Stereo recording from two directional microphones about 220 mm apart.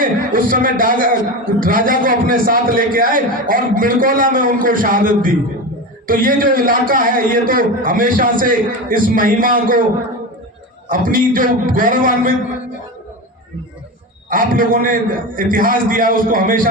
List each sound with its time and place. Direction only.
0.0 s a man's voice: 40° right (ahead or behind)
10.8 s a man's voice: 40° right (ahead or behind)
14.3 s a man's voice: 40° right (ahead or behind)